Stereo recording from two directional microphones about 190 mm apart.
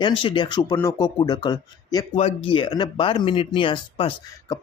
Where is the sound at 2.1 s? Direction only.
35° left (ahead or behind).